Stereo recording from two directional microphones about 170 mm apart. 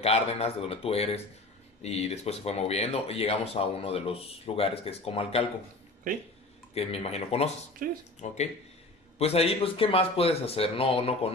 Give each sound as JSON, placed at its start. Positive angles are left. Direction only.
{"t": 0.0, "sound": "speech", "side_deg": 35}
{"t": 6.7, "sound": "speech", "side_deg": 35}
{"t": 7.8, "sound": "speech", "side_deg": -55}
{"t": 8.2, "sound": "speech", "side_deg": 45}